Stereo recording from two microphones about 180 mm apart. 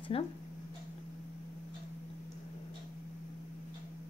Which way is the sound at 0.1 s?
30° left (ahead or behind).